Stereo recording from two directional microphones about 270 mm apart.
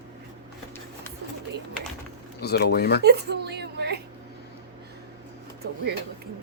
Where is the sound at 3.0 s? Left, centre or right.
Right.